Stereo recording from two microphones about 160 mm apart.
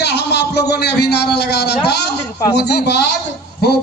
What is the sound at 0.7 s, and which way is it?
A man's voice, 90° left.